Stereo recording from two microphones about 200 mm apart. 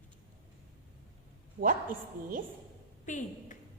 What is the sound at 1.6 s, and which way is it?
Speech, 45° right (ahead or behind).